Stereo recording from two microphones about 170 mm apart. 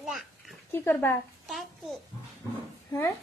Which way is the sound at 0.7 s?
15° left (ahead or behind).